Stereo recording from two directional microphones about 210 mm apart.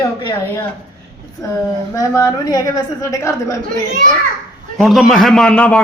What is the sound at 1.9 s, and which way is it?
A woman's voice, 15° left (ahead or behind).